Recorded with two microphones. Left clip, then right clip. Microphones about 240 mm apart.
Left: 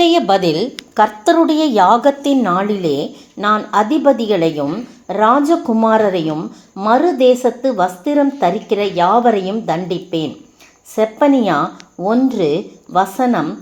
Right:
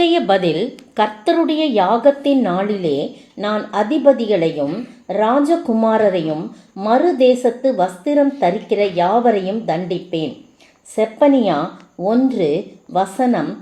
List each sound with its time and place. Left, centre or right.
0.0 s a woman's voice: left